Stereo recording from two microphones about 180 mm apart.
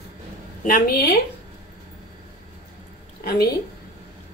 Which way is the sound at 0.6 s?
50° left (ahead or behind).